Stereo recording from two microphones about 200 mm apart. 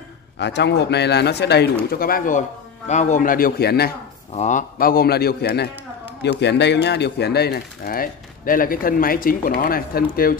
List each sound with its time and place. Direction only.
0.4 s speech: 60° left (ahead or behind)
4.3 s speech: 35° left (ahead or behind)